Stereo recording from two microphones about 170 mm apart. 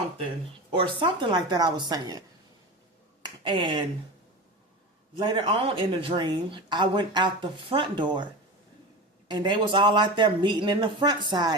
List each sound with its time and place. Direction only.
0.7 s speech: 30° right (ahead or behind)
3.4 s speech: 30° right (ahead or behind)
5.1 s speech: 30° right (ahead or behind)
9.3 s speech: 25° right (ahead or behind)